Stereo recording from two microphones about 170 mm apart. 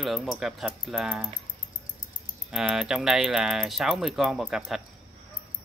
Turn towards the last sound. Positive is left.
turn(degrees=0)  # may be behind; listen again after turning